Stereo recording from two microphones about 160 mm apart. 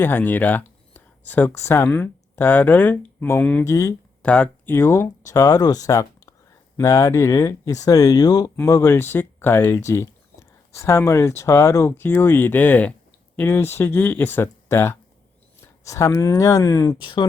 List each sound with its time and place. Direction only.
0.0 s speech: 10° left (ahead or behind)
4.2 s speech: 10° left (ahead or behind); by 17.2 s 30° left (ahead or behind)